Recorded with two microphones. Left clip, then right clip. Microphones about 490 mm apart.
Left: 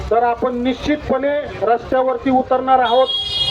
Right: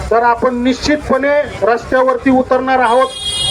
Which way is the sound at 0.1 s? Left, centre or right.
Left.